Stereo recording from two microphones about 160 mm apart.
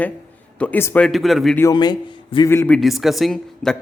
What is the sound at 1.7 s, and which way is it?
Speech, 25° left (ahead or behind).